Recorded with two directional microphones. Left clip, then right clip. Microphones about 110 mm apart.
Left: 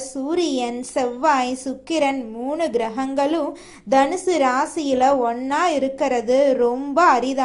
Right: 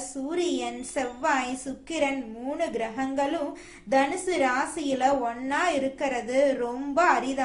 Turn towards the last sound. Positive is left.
turn(degrees=60)  # may be behind; listen again after turning